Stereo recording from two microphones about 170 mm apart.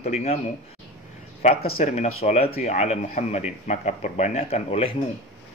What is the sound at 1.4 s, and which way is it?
Speech, 40° left (ahead or behind).